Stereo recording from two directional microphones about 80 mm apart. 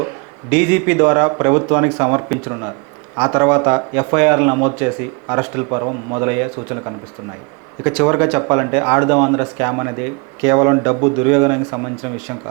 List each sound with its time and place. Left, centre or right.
0.5 s speech: centre